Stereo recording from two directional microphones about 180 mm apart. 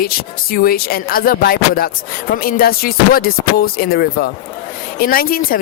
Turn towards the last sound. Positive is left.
turn(degrees=55)  # may be behind; listen again after turning